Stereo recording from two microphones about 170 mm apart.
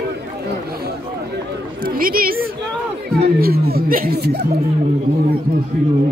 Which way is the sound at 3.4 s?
65° right (ahead or behind).